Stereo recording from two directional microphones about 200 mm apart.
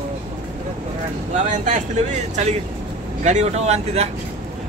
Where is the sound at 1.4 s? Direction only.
40° right (ahead or behind).